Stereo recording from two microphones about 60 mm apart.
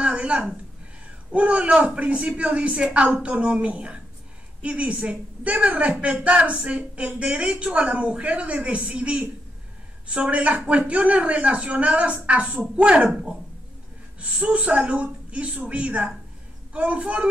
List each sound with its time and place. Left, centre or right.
0.0 s a woman's voice: centre